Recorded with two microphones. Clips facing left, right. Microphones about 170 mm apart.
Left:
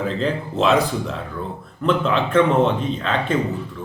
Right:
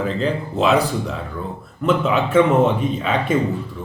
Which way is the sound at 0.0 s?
Centre (ahead or behind).